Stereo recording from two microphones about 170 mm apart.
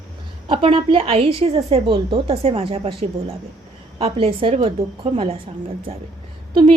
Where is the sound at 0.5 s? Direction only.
30° right (ahead or behind).